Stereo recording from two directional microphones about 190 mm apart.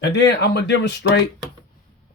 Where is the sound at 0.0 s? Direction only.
65° left (ahead or behind).